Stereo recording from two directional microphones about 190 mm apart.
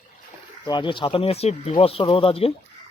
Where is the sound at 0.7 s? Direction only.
25° left (ahead or behind).